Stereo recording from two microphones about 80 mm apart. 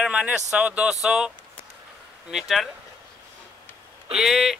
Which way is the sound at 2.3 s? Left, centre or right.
Centre.